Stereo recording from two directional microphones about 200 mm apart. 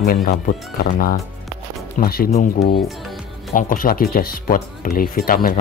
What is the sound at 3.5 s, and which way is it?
Speech, 45° left (ahead or behind).